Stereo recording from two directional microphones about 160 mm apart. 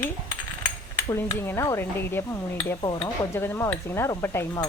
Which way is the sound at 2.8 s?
30° left (ahead or behind).